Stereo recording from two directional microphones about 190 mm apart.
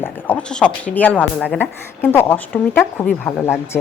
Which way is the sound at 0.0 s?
5° left (ahead or behind).